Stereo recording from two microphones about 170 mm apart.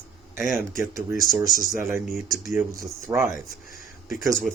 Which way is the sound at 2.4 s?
15° right (ahead or behind).